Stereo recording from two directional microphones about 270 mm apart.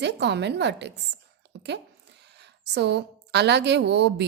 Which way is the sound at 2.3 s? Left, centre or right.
Right.